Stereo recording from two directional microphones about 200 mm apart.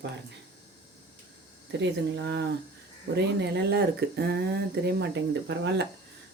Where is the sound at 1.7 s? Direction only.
60° right (ahead or behind).